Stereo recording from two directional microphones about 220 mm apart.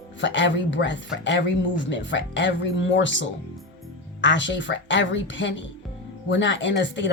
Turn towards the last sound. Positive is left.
turn(degrees=55)  # may be behind; listen again after turning